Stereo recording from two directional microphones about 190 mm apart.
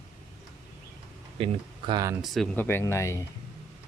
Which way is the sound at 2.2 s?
Centre (ahead or behind).